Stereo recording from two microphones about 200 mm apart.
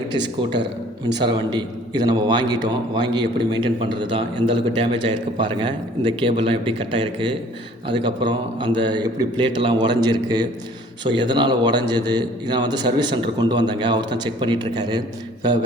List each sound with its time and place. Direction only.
0.6 s a man's voice: 20° right (ahead or behind)